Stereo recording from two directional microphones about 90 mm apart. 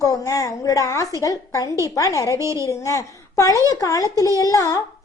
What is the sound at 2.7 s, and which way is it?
A woman's voice, 35° left (ahead or behind).